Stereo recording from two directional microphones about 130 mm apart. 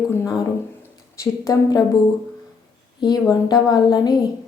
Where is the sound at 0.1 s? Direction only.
25° left (ahead or behind).